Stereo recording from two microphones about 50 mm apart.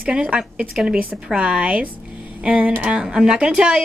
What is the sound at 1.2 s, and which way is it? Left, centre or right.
Speech, right.